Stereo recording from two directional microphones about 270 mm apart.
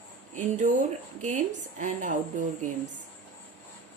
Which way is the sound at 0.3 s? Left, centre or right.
Right.